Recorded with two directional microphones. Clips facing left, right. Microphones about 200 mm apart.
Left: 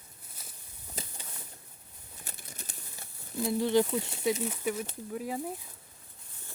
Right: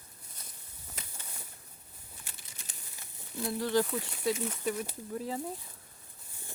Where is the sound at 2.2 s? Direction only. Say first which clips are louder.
Left 6 dB; 40° left (ahead or behind).